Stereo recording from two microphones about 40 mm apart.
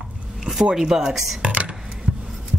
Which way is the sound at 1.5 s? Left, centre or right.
Right.